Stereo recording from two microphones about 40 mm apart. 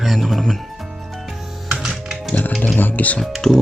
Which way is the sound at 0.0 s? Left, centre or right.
Centre.